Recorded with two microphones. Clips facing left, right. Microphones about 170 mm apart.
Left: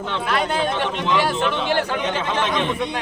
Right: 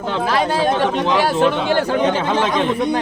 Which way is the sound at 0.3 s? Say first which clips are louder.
Right 4 dB; 35° right (ahead or behind).